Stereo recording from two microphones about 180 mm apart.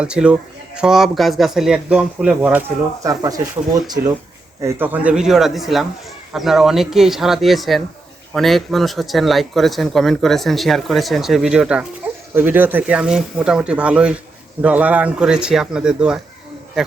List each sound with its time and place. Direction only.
0.0 s speech: 5° right (ahead or behind); by 4.1 s 20° right (ahead or behind)
4.6 s speech: 10° right (ahead or behind)